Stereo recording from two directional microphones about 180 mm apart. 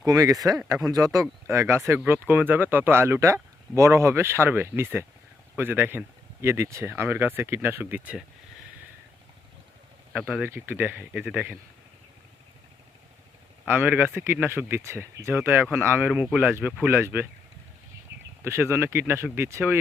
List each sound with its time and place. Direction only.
0.0 s speech: 20° right (ahead or behind)
10.1 s speech: 5° right (ahead or behind)
13.7 s speech: 10° right (ahead or behind)
18.4 s speech: 15° right (ahead or behind)